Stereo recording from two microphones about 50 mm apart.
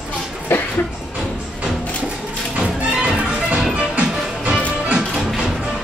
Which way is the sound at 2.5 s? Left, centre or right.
Right.